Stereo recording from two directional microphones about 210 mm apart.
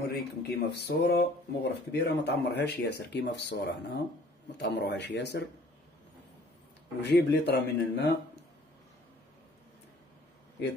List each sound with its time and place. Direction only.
0.1 s speech: 50° left (ahead or behind)
7.1 s speech: 55° left (ahead or behind)